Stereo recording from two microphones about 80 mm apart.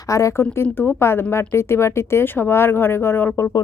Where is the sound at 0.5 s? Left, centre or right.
Left.